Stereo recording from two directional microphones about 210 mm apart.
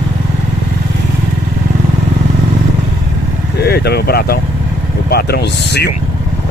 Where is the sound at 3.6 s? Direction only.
50° left (ahead or behind).